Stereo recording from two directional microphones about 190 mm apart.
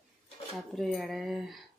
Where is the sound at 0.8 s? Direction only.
Centre (ahead or behind).